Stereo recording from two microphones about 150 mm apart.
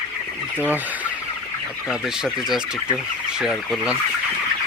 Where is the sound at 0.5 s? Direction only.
10° right (ahead or behind).